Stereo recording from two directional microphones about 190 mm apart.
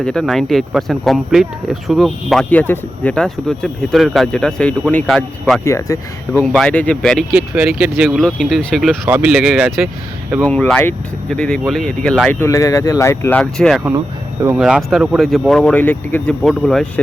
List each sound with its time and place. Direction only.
0.0 s speech: 5° left (ahead or behind)
5.6 s speech: 15° left (ahead or behind)
6.4 s speech: 5° left (ahead or behind)
10.4 s speech: 5° left (ahead or behind)
12.4 s speech: 15° left (ahead or behind)
13.4 s speech: centre (ahead or behind)